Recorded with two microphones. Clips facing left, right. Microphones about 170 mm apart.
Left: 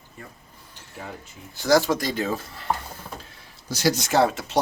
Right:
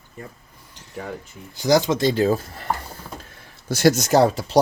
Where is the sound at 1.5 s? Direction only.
20° right (ahead or behind); by 2.4 s 35° right (ahead or behind).